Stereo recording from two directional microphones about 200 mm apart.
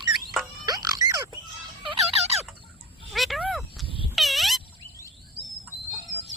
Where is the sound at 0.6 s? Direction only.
20° right (ahead or behind).